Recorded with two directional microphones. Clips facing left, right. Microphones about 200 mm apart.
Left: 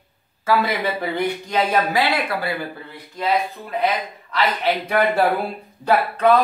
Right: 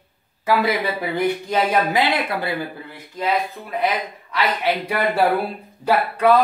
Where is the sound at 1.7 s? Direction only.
20° right (ahead or behind).